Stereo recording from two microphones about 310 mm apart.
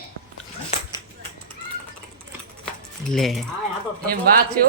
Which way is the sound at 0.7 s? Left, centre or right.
Centre.